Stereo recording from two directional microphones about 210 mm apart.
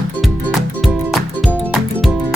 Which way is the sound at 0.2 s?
Centre (ahead or behind).